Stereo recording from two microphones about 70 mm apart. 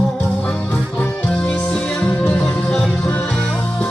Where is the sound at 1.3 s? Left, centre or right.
Centre.